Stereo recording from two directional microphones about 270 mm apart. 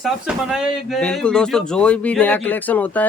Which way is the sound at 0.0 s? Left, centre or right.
Centre.